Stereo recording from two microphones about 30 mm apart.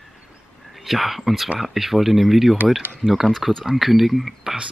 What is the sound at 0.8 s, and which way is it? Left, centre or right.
Speech, centre.